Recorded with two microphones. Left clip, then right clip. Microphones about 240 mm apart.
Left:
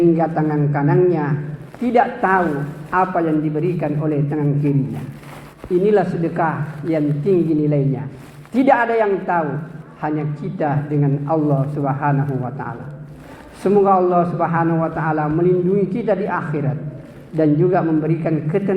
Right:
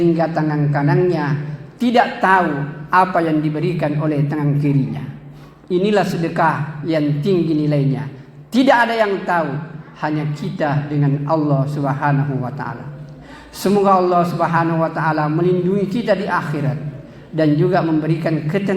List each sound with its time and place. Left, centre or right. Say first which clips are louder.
0.2 s a man's voice: even; right
5.8 s a man's voice: left 1 dB; right